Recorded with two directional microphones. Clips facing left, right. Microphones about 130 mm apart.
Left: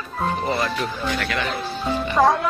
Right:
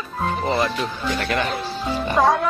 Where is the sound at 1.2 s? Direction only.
45° right (ahead or behind).